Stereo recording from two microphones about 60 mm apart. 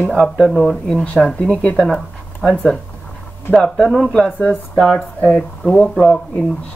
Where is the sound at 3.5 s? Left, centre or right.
Centre.